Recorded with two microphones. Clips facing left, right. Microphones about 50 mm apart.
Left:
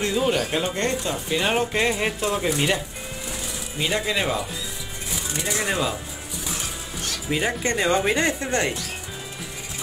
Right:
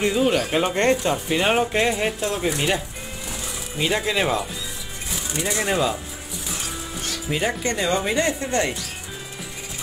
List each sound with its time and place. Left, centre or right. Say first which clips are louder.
0.2 s speech: right 2 dB; centre
0.7 s speech: right 5 dB; right
1.3 s speech: right 2 dB; centre
1.7 s speech: right 1 dB; centre
5.4 s speech: right 3 dB; centre
7.2 s speech: even; centre
7.6 s speech: left 1 dB; left